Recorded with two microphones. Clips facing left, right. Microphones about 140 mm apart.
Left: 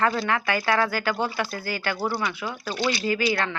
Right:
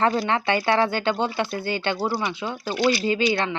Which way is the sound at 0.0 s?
30° right (ahead or behind).